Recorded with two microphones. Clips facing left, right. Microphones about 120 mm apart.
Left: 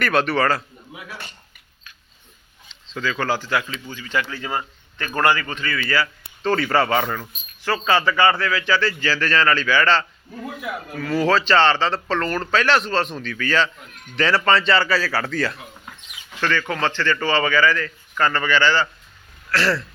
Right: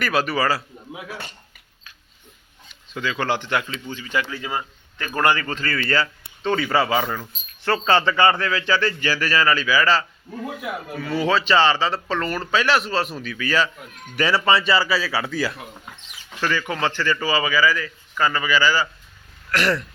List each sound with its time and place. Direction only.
0.0 s speech: 5° right (ahead or behind)
2.8 s a man's voice: 15° right (ahead or behind)
4.3 s a man's voice: 5° right (ahead or behind)
5.4 s speech: 35° right (ahead or behind)
6.4 s speech: centre (ahead or behind)
7.6 s a man's voice: 30° right (ahead or behind)